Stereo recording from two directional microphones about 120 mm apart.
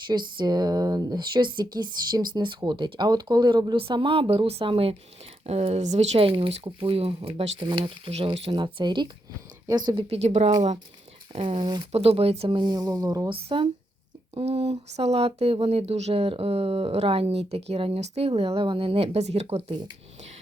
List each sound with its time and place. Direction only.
0.1 s speech: 35° right (ahead or behind); by 7.5 s 55° right (ahead or behind)
7.6 s speech: 45° right (ahead or behind)
10.1 s speech: 65° right (ahead or behind)
11.3 s speech: 50° right (ahead or behind)
11.6 s speech: 40° right (ahead or behind)
11.9 s speech: 60° right (ahead or behind)
12.5 s speech: 35° right (ahead or behind)
13.3 s speech: 45° right (ahead or behind)
14.3 s speech: 60° right (ahead or behind)